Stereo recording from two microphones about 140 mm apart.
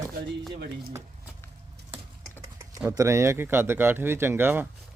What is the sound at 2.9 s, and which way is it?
Speech, 20° right (ahead or behind).